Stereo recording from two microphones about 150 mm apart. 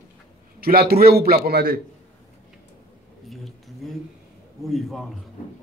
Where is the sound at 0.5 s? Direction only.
85° right.